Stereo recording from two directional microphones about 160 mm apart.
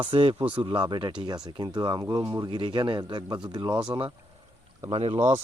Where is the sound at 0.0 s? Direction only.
30° right (ahead or behind).